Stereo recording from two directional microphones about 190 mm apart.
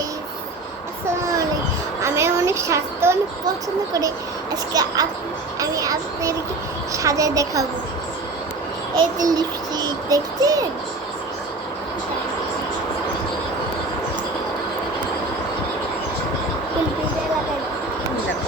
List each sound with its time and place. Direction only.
2.0 s a woman's voice: 15° right (ahead or behind)
4.7 s a child's voice: 20° right (ahead or behind)
9.0 s a child's voice: 20° right (ahead or behind)